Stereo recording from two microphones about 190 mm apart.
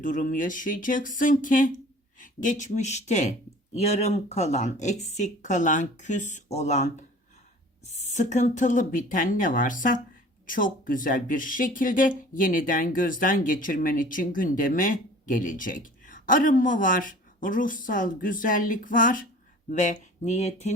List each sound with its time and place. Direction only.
0.0 s speech: 45° left (ahead or behind)
8.1 s speech: 40° left (ahead or behind)